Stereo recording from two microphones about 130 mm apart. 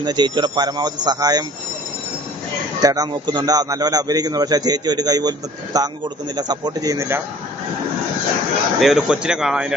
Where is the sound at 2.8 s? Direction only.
30° right (ahead or behind).